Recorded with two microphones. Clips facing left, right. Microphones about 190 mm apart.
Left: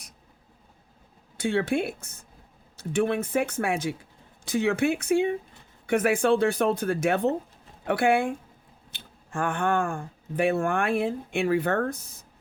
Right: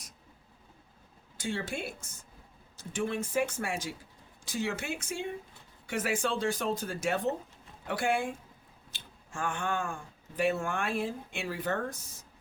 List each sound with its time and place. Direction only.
1.4 s speech: 60° left (ahead or behind)